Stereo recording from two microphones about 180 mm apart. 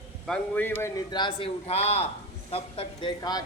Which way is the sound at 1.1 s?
25° left (ahead or behind).